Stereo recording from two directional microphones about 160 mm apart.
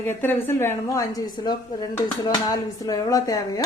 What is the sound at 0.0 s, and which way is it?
A woman's voice, 15° left (ahead or behind).